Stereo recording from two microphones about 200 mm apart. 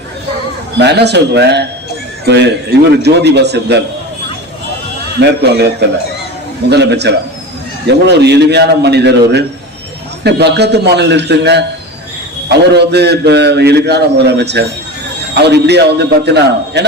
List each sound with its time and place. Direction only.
0.8 s a man's voice: 55° right (ahead or behind)
5.2 s a man's voice: 55° right (ahead or behind)